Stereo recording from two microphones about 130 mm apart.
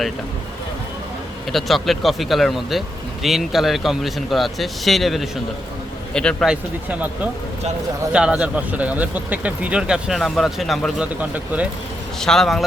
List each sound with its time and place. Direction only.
1.5 s speech: centre (ahead or behind)
6.5 s speech: 10° right (ahead or behind)
12.2 s speech: 5° left (ahead or behind)